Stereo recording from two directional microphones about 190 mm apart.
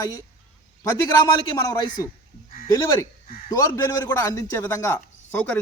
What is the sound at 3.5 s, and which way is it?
A man's voice, 20° left (ahead or behind).